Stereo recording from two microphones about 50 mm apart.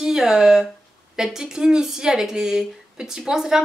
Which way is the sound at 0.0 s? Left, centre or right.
Centre.